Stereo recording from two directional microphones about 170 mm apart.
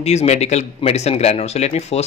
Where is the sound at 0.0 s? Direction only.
40° left (ahead or behind).